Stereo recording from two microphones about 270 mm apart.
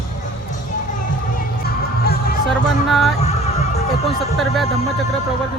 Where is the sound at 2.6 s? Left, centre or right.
Centre.